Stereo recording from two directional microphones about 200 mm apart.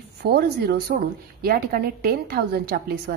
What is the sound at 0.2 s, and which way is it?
A woman's voice, 55° right (ahead or behind).